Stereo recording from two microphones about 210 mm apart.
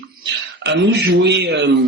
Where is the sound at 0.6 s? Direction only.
55° right (ahead or behind).